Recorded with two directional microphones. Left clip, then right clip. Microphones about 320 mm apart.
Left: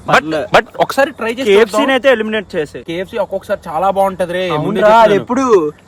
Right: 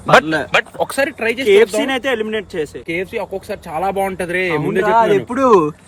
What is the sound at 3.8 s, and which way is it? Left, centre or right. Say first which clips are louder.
A man's voice: left 5 dB; left.